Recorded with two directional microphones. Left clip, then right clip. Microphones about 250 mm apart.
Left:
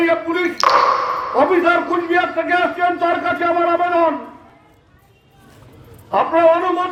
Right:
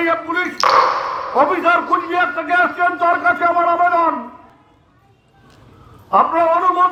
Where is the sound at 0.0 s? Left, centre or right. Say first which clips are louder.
Left 1 dB; right.